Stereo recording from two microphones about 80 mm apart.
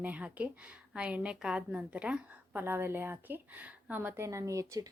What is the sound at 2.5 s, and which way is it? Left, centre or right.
Speech, right.